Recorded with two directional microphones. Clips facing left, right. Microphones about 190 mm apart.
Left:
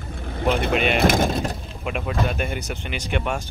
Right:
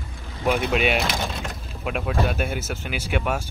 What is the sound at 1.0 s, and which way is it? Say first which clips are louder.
Speech: left 8 dB; 50° left (ahead or behind).